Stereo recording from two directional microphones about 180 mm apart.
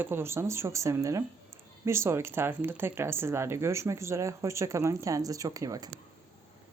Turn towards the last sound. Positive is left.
turn(degrees=-20)  # may be behind; listen again after turning